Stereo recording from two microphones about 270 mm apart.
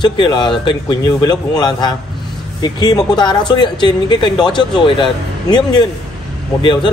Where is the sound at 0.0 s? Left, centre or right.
Centre.